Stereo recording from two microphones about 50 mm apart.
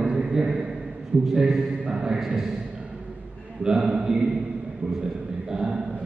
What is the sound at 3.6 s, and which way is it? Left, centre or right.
Speech, centre.